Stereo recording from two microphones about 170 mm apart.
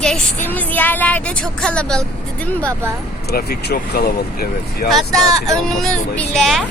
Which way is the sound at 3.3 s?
70° left (ahead or behind).